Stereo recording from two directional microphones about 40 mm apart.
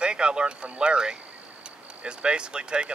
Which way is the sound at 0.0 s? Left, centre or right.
Right.